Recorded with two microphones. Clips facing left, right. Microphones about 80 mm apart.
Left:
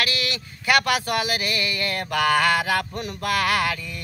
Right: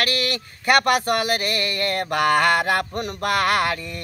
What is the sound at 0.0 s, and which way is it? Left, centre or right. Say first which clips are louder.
Speech: right 3 dB; right.